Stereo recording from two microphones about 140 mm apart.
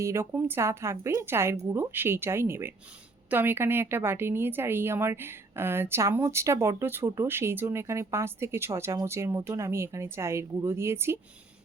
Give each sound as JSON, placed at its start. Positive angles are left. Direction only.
{"t": 0.0, "sound": "a woman's voice", "side_deg": -20}